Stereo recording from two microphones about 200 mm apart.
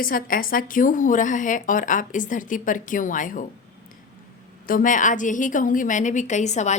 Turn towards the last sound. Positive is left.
turn(degrees=35)  # may be behind; listen again after turning